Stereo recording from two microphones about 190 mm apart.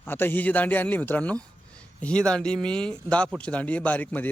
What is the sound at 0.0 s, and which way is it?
A man's voice, 10° left (ahead or behind).